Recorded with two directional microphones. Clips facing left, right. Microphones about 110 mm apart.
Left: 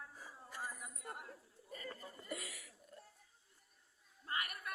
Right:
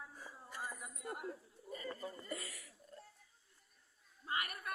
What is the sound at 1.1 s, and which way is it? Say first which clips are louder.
Chatter: right 10 dB; 15° right (ahead or behind).